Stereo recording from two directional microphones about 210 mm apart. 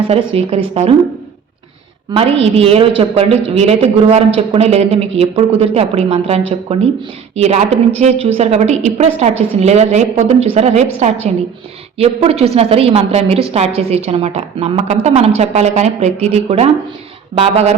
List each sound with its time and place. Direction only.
0.1 s a woman's voice: 30° right (ahead or behind)
2.1 s a woman's voice: 25° right (ahead or behind)